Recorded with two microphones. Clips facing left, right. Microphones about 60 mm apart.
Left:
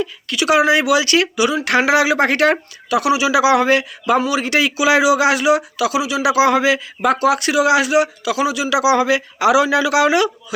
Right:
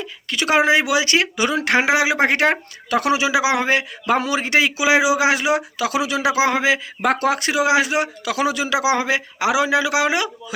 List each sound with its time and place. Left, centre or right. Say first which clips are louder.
0.0 s speech: left 4 dB; right
1.7 s a man's voice: left 3 dB; right
2.9 s a man's voice: left 3 dB; right
4.0 s a man's voice: left 3 dB; right
5.9 s speech: left 1 dB; right
6.3 s a man's voice: left 5 dB; right
7.0 s speech: left 4 dB; right